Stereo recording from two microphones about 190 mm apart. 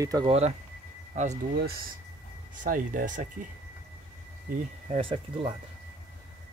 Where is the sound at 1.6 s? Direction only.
50° right (ahead or behind).